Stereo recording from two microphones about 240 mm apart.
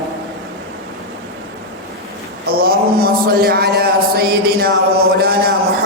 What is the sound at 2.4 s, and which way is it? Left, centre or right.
A man's voice, right.